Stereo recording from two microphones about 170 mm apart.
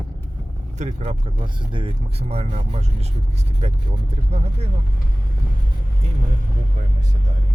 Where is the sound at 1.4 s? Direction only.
30° right (ahead or behind).